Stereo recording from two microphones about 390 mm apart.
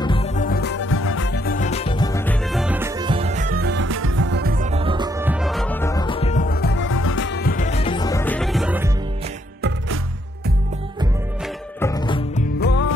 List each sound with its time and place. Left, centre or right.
0.0 s music: centre
11.8 s music: centre; by 12.9 s left